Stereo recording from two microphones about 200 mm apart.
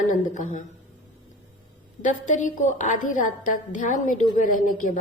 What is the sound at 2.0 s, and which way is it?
A woman's voice, 40° left (ahead or behind).